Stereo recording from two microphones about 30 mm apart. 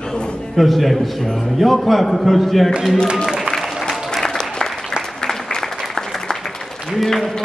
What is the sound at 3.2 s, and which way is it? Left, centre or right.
Music, centre.